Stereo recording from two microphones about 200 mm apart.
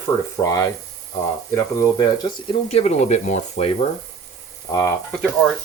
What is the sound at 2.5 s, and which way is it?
Speech, 30° left (ahead or behind).